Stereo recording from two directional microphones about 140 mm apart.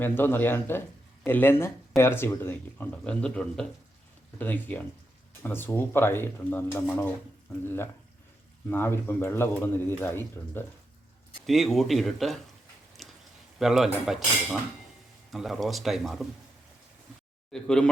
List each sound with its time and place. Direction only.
0.0 s speech: 15° left (ahead or behind)
8.7 s speech: 15° left (ahead or behind)
11.4 s speech: centre (ahead or behind)
13.0 s a sound: centre (ahead or behind)
13.6 s speech: centre (ahead or behind)
17.5 s speech: 5° left (ahead or behind)